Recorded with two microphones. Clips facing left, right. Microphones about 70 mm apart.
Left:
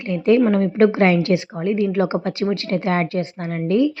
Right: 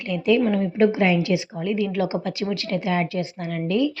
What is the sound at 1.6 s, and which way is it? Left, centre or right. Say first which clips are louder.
Speech: left 4 dB; left.